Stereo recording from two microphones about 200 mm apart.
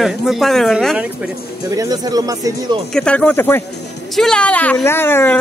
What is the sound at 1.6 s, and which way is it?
Speech, 15° right (ahead or behind).